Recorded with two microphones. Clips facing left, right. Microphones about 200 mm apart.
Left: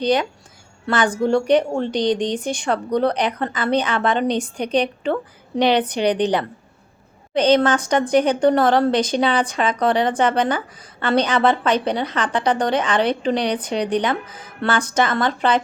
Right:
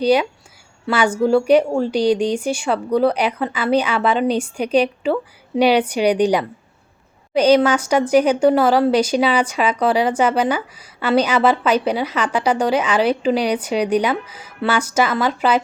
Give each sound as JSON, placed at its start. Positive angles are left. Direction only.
{"t": 0.0, "sound": "a woman's voice", "side_deg": -10}